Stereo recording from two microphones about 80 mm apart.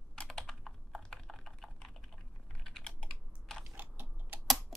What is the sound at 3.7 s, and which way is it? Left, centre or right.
Typing, right.